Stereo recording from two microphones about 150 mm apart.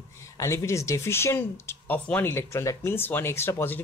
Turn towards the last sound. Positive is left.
turn(degrees=15)  # may be behind; listen again after turning